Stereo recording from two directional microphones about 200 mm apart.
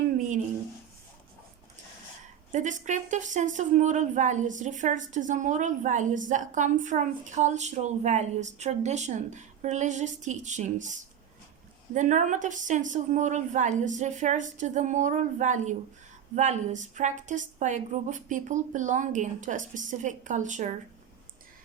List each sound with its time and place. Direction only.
2.5 s a woman's voice: 35° right (ahead or behind)
11.9 s a woman's voice: 40° right (ahead or behind)